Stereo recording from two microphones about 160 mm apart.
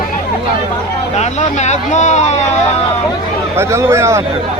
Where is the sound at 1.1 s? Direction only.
45° left (ahead or behind).